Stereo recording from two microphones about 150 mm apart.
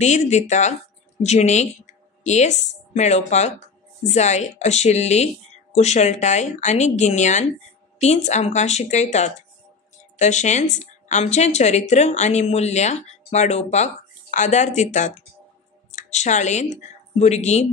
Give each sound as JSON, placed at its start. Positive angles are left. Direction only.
{"t": 0.0, "sound": "speech", "side_deg": 50}